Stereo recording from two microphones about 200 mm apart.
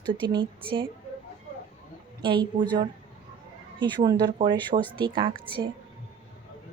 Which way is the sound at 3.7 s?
25° right (ahead or behind).